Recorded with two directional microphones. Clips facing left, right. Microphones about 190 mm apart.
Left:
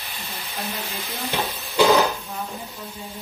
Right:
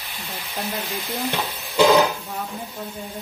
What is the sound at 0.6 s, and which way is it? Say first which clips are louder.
Stir: right 3 dB; 15° right (ahead or behind).